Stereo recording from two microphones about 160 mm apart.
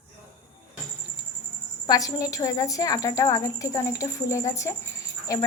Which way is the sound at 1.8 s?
20° left (ahead or behind).